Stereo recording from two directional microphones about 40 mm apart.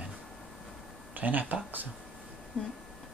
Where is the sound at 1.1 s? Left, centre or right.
Right.